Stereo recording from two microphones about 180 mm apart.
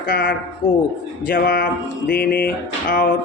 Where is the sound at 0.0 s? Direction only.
50° left (ahead or behind).